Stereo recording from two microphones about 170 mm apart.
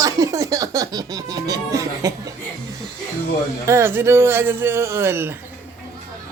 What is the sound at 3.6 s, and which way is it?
Speech, 15° right (ahead or behind).